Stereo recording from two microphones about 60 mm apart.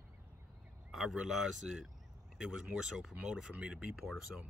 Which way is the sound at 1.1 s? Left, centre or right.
Centre.